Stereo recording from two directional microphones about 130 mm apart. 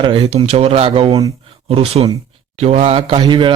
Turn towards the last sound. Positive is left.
turn(degrees=-40)  # may be behind; listen again after turning